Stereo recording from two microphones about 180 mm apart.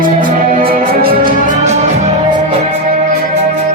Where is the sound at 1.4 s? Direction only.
40° right (ahead or behind).